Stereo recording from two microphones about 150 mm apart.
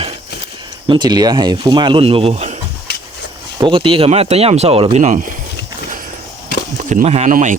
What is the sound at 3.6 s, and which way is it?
Speech, 35° right (ahead or behind).